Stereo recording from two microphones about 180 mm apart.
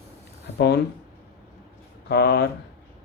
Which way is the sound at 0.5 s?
60° left (ahead or behind).